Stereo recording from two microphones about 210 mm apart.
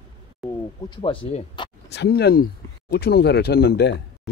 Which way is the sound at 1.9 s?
50° left (ahead or behind).